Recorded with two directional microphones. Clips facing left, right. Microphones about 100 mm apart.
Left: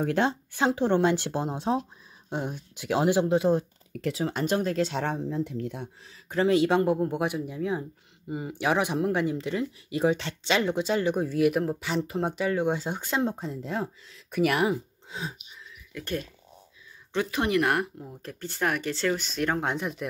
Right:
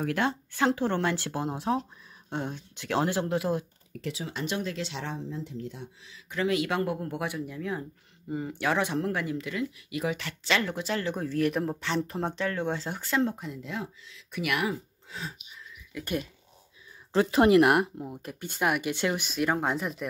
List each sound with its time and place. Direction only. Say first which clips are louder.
0.0 s speech: left 3 dB; 25° left (ahead or behind)
4.0 s speech: left 6 dB; 50° left (ahead or behind)
14.7 s speech: left 5 dB; 20° left (ahead or behind)
15.9 s speech: even; 10° right (ahead or behind)
17.1 s speech: right 6 dB; 35° right (ahead or behind)
17.6 s speech: right 3 dB; 20° right (ahead or behind); by 20.1 s centre (ahead or behind)